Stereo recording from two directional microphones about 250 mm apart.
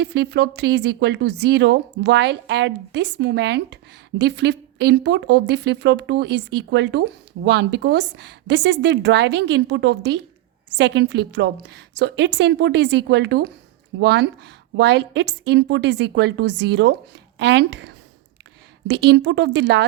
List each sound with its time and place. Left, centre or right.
0.0 s speech: right